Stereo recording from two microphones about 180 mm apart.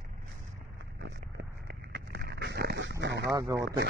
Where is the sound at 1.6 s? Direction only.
60° right (ahead or behind).